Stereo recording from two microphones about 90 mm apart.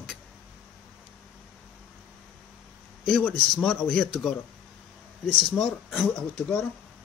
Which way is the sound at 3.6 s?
20° left (ahead or behind).